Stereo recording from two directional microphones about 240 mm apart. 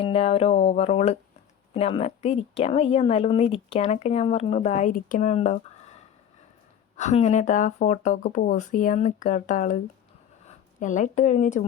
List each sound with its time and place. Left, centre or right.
0.0 s speech: left
10.8 s speech: left